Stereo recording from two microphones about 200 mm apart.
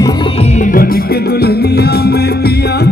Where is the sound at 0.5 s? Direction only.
40° left (ahead or behind).